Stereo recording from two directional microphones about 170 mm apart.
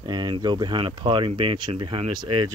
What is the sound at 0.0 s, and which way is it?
Speech, 25° right (ahead or behind).